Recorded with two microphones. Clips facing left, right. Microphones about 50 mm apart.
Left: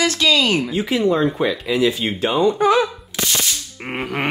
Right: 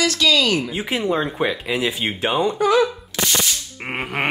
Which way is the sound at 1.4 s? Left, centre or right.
Right.